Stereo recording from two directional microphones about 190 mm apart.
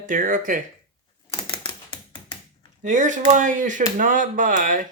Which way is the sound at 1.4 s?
25° left (ahead or behind).